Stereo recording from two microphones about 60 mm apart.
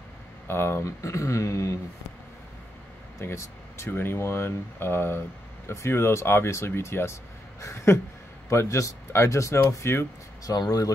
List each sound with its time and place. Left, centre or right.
0.5 s speech: left
0.8 s speech: left
3.2 s speech: left
10.4 s speech: left